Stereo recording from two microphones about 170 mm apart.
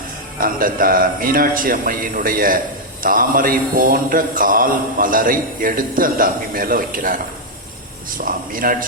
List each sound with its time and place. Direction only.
0.3 s speech: 55° right (ahead or behind)
8.2 s speech: 55° right (ahead or behind)